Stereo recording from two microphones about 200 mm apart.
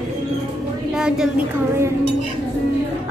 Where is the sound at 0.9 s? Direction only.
5° right (ahead or behind).